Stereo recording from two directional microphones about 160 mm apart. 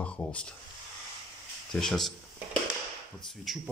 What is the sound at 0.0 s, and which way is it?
Speech, 5° left (ahead or behind).